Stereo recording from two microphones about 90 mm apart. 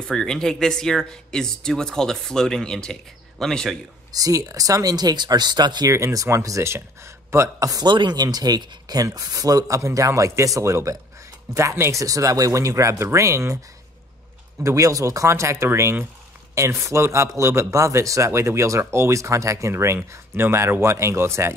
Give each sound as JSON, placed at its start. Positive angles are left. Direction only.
{"t": 0.1, "sound": "speech", "side_deg": 5}
{"t": 4.1, "sound": "speech", "side_deg": -40}
{"t": 5.9, "sound": "speech", "side_deg": -35}
{"t": 7.8, "sound": "speech", "side_deg": -60}
{"t": 14.6, "sound": "speech", "side_deg": -35}